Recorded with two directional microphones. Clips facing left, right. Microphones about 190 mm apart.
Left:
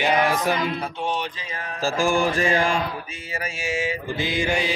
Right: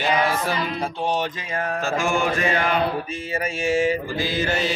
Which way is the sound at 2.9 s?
30° right (ahead or behind).